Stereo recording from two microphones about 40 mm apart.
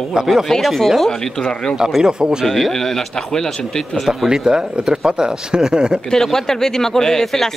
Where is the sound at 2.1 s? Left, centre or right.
Right.